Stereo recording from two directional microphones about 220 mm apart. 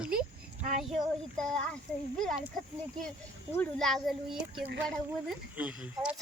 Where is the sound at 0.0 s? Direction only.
5° right (ahead or behind).